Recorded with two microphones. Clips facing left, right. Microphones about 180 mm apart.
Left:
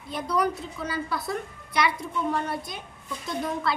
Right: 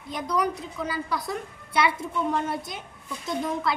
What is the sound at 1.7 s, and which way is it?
A child's voice, 25° right (ahead or behind).